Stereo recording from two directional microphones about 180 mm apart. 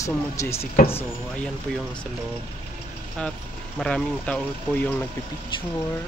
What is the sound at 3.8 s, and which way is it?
Speech, 5° left (ahead or behind).